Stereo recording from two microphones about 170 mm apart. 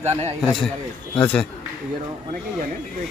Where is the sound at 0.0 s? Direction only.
40° right (ahead or behind).